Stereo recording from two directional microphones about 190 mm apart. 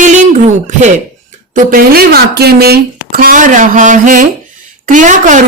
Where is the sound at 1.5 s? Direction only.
50° right (ahead or behind).